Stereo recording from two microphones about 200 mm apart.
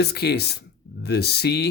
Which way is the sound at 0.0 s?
55° left (ahead or behind).